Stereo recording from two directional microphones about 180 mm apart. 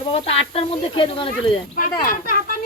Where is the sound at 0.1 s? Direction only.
35° left (ahead or behind).